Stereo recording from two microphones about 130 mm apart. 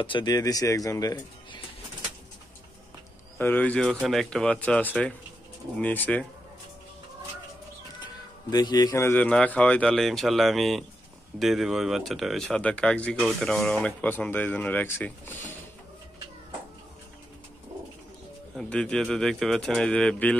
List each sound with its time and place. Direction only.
0.0 s speech: 35° left (ahead or behind)
3.3 s speech: 15° left (ahead or behind)
8.5 s speech: 30° left (ahead or behind); by 15.3 s 15° left (ahead or behind)
18.6 s speech: 5° left (ahead or behind)